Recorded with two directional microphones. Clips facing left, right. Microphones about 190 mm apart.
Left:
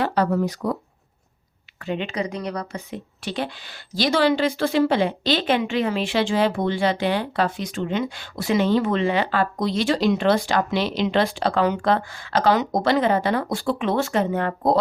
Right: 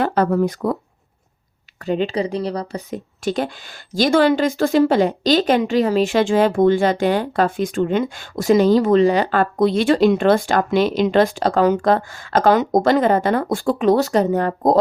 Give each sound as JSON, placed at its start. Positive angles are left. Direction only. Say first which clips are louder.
{"t": 0.0, "sound": "speech", "louder": "right 4 dB", "side_deg": -50}
{"t": 1.8, "sound": "speech", "louder": "right 6 dB", "side_deg": -40}